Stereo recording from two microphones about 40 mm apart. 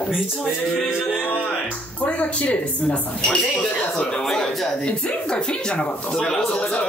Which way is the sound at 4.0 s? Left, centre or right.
Centre.